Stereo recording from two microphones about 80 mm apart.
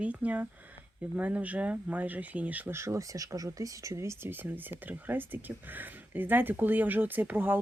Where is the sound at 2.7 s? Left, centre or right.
Right.